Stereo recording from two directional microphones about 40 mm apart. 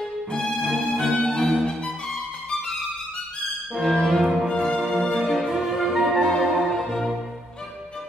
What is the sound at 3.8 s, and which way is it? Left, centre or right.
Music, left.